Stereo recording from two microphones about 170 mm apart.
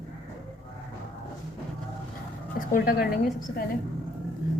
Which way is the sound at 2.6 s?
60° left (ahead or behind).